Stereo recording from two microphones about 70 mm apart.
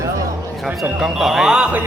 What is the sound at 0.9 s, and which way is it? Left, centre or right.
Speech, centre.